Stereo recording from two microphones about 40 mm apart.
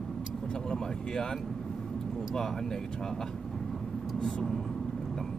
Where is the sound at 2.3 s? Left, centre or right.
Centre.